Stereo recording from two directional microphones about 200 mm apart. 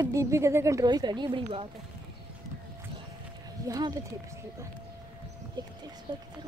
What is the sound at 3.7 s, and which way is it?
Speech, 20° right (ahead or behind).